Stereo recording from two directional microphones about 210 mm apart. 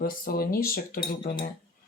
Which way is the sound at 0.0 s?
45° left (ahead or behind).